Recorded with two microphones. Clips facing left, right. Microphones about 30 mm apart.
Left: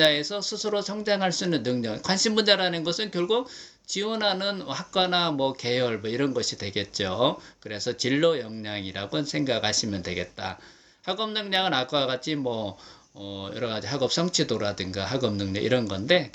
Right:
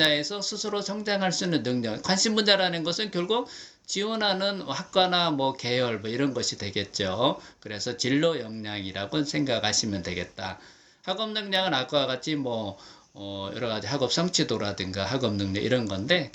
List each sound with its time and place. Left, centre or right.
0.0 s speech: centre